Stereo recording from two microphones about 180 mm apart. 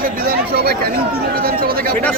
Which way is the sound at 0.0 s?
55° right (ahead or behind).